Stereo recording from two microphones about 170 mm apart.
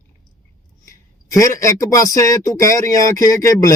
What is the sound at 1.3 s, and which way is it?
Speech, 20° left (ahead or behind).